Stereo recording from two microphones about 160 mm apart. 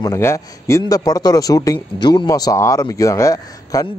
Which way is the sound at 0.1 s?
15° left (ahead or behind).